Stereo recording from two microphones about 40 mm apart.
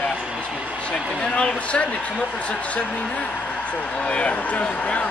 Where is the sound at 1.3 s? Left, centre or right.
Left.